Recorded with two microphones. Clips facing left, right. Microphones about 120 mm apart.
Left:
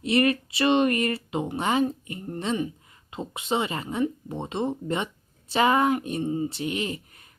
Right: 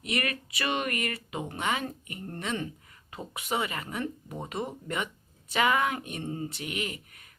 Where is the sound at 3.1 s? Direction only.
25° left (ahead or behind).